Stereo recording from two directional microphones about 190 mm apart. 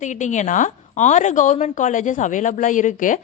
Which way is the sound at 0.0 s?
40° left (ahead or behind).